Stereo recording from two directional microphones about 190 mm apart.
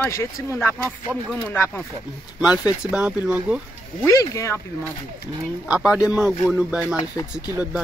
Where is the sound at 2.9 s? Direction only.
5° right (ahead or behind).